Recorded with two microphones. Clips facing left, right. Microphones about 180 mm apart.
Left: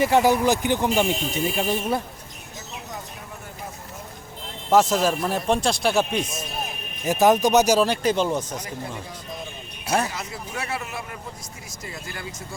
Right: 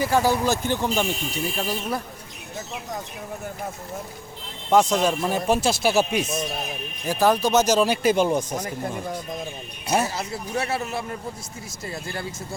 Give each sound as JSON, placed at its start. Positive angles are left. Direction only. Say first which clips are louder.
{"t": 0.0, "sound": "speech", "louder": "left 3 dB", "side_deg": 20}
{"t": 4.7, "sound": "speech", "louder": "even", "side_deg": 5}
{"t": 7.0, "sound": "speech", "louder": "left 3 dB", "side_deg": 20}
{"t": 7.8, "sound": "speech", "louder": "right 1 dB", "side_deg": -5}
{"t": 8.5, "sound": "speech", "louder": "right 4 dB", "side_deg": -50}
{"t": 10.1, "sound": "speech", "louder": "right 4 dB", "side_deg": -30}